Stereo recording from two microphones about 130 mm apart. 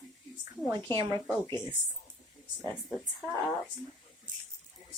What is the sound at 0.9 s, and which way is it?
Speech, 35° right (ahead or behind).